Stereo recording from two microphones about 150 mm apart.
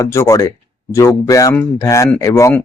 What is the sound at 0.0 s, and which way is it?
Speech, 20° left (ahead or behind).